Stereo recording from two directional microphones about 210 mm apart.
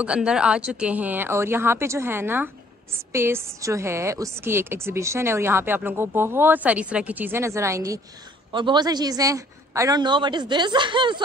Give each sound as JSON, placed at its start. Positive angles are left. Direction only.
{"t": 0.0, "sound": "a woman's voice", "side_deg": -5}